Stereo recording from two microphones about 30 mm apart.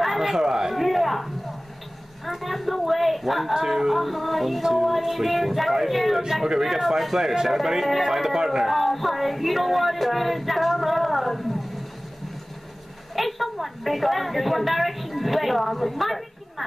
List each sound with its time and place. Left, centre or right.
0.2 s speech: centre
0.7 s speech: centre
2.4 s speech: centre
3.5 s speech: centre
8.6 s child singing: centre
13.1 s a woman's voice: centre